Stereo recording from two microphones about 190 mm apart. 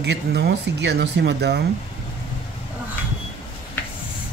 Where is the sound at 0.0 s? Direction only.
60° right (ahead or behind).